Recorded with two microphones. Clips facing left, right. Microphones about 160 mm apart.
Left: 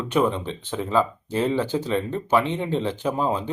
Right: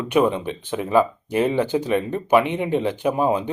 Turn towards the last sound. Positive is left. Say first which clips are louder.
# right 4 dB
turn(degrees=-15)  # may be behind; listen again after turning